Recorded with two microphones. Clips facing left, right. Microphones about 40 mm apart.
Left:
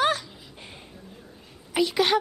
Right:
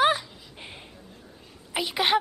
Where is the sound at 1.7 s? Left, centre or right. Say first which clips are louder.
Left 2 dB; centre.